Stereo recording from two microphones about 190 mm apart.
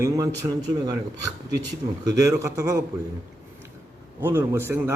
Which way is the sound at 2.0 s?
20° right (ahead or behind).